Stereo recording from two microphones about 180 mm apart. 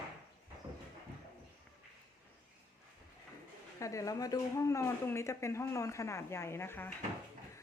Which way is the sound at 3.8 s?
20° left (ahead or behind).